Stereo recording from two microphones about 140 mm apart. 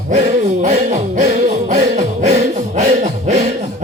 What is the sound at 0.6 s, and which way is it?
Music, 60° right (ahead or behind).